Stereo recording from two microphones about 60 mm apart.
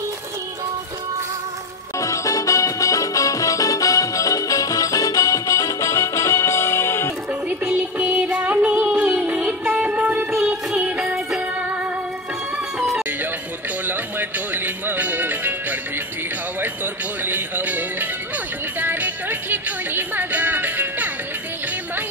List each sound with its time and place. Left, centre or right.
2.0 s music: left
7.4 s music: right
10.3 s music: centre
13.8 s music: right
16.6 s music: right